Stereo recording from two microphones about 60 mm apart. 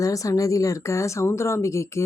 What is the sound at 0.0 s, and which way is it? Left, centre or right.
Speech, left.